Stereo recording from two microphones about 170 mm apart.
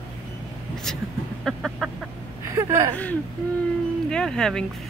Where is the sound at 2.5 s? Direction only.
15° right (ahead or behind).